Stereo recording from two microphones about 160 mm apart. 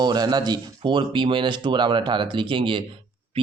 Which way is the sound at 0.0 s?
25° right (ahead or behind).